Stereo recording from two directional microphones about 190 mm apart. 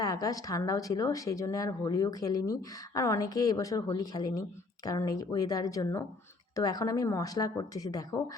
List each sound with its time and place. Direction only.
0.0 s speech: 20° left (ahead or behind)